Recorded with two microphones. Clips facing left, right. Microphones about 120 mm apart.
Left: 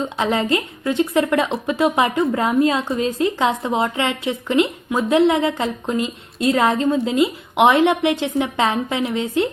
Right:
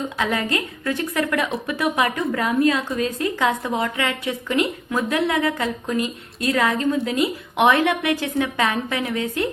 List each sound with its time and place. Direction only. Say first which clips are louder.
0.2 s speech: left 4 dB; 25° left (ahead or behind)